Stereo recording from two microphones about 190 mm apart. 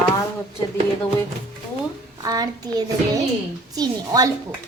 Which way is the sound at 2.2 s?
20° right (ahead or behind).